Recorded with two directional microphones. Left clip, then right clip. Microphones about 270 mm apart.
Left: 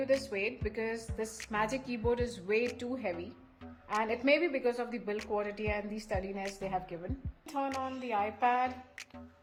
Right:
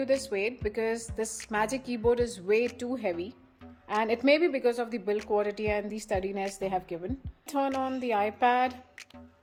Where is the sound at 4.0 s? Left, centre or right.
Right.